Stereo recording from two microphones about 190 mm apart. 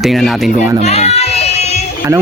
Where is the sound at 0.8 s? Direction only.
35° left (ahead or behind).